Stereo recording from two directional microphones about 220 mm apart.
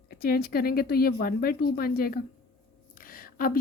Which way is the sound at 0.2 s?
45° left (ahead or behind).